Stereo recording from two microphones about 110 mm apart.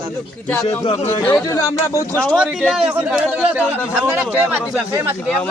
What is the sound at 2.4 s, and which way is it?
A man's voice, 5° right (ahead or behind).